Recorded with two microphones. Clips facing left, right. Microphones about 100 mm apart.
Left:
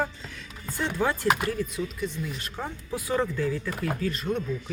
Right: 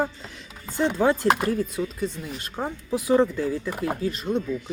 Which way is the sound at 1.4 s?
35° right (ahead or behind).